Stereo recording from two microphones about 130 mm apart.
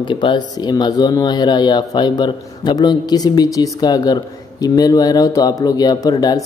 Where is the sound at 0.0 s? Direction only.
40° left (ahead or behind).